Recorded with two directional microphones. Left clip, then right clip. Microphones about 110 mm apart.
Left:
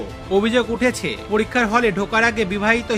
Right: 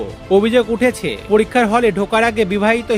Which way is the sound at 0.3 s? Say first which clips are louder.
Right 5 dB; 35° right (ahead or behind).